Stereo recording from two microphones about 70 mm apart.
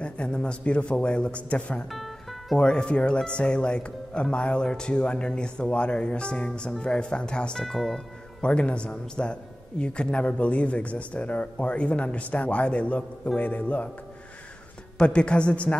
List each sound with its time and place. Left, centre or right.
0.0 s a man's voice: centre
1.9 s music: centre
2.6 s a man's voice: centre
7.6 s speech: centre
8.4 s a man's voice: centre
15.0 s a man's voice: centre